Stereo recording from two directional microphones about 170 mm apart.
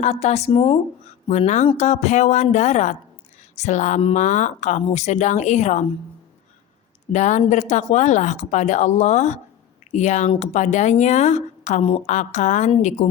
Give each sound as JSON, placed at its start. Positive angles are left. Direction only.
{"t": 0.0, "sound": "a woman's voice", "side_deg": 40}
{"t": 7.1, "sound": "a woman's voice", "side_deg": 45}